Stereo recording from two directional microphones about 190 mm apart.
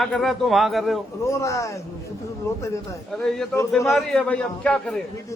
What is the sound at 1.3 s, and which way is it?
Speech, 15° left (ahead or behind).